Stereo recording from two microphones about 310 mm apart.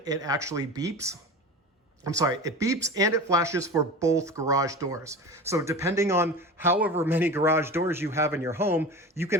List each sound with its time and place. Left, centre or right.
0.0 s speech: centre